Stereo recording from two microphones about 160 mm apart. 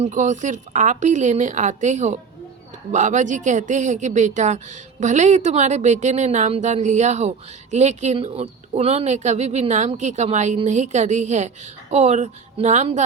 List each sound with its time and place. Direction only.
0.0 s a woman's voice: 50° right (ahead or behind)